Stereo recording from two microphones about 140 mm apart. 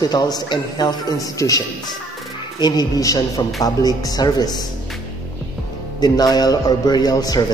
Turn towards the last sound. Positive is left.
turn(degrees=30)  # may be behind; listen again after turning